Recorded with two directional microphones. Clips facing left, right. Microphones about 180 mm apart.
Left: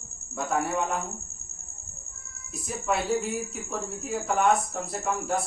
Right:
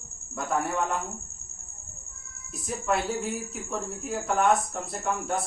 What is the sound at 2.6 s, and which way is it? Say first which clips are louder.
Speech: even; centre (ahead or behind).